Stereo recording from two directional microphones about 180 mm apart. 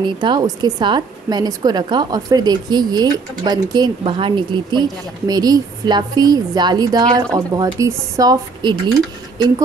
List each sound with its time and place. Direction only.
0.0 s a woman's voice: 25° right (ahead or behind)